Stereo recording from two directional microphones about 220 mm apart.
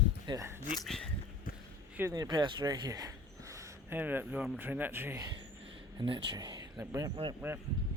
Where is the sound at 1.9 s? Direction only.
15° right (ahead or behind).